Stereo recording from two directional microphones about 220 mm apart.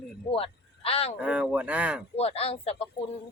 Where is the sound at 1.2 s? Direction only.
5° right (ahead or behind).